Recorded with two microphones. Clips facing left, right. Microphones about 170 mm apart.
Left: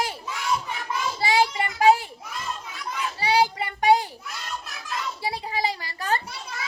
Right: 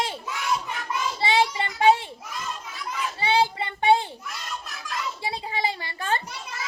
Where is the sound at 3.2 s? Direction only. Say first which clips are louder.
Left 1 dB; 25° right (ahead or behind).